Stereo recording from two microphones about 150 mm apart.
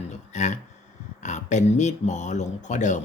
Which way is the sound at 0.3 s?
55° left (ahead or behind).